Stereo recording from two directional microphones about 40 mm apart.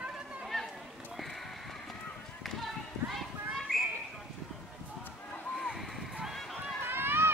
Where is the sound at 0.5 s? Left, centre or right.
Centre.